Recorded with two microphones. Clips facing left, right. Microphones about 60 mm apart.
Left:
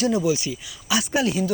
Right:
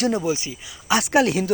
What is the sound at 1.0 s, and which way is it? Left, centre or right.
Speech, right.